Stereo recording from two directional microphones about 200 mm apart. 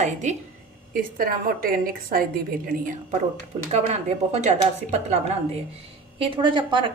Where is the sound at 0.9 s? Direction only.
45° right (ahead or behind).